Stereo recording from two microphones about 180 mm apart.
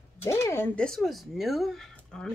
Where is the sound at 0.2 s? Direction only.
15° left (ahead or behind).